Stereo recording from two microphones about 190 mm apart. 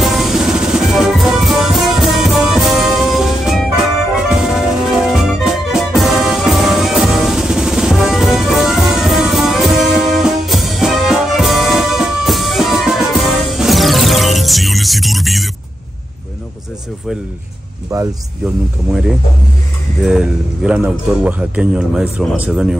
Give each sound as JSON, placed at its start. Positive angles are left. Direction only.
{"t": 0.0, "sound": "music", "side_deg": 0}
{"t": 17.9, "sound": "speech", "side_deg": -20}
{"t": 20.1, "sound": "speech", "side_deg": -5}